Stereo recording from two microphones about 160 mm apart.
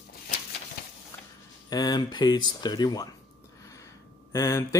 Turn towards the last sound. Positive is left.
turn(degrees=20)  # may be behind; listen again after turning